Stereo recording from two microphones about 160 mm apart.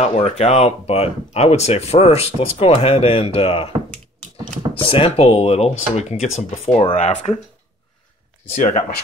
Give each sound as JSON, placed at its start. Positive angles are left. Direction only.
{"t": 0.0, "sound": "speech", "side_deg": 40}
{"t": 4.7, "sound": "speech", "side_deg": 35}
{"t": 8.5, "sound": "speech", "side_deg": 45}